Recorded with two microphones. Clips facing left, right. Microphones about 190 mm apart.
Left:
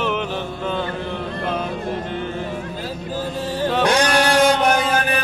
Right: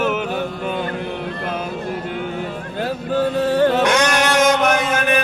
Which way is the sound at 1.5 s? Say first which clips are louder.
Even; 5° right (ahead or behind).